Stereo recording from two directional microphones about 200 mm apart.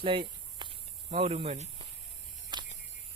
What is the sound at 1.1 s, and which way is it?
Speech, 30° right (ahead or behind).